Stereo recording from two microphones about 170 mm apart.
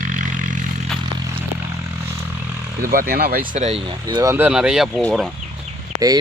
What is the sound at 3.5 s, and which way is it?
Speech, 40° right (ahead or behind).